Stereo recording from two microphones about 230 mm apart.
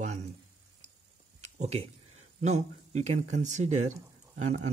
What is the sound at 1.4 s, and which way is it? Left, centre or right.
Speech, right.